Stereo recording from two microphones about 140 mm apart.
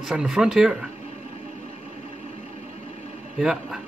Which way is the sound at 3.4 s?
5° right (ahead or behind).